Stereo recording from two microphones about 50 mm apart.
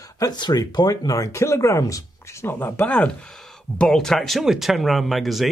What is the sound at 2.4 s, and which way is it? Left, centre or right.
Speech, left.